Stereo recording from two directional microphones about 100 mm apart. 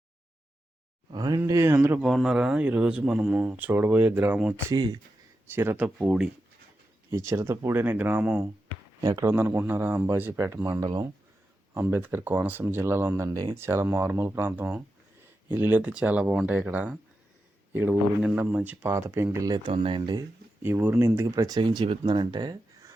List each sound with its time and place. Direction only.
1.1 s speech: 40° right (ahead or behind)
1.5 s speech: 30° right (ahead or behind)
2.0 s speech: centre (ahead or behind)
4.7 s speech: 40° right (ahead or behind)
5.5 s speech: 20° right (ahead or behind)
7.1 s speech: 25° right (ahead or behind)
9.0 s speech: 35° right (ahead or behind)
9.2 s speech: 25° right (ahead or behind)
13.6 s speech: 25° right (ahead or behind)
19.5 s speech: 45° right (ahead or behind)
19.7 s speech: 70° right (ahead or behind)
20.0 s speech: 45° right (ahead or behind)
20.6 s speech: 20° right (ahead or behind); by 21.6 s 35° right (ahead or behind)
21.6 s speech: 45° right (ahead or behind)